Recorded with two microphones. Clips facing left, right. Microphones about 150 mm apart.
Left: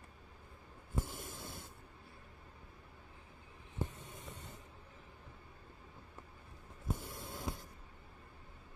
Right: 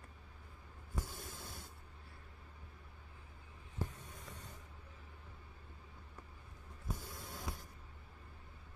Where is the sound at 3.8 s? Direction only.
20° left (ahead or behind).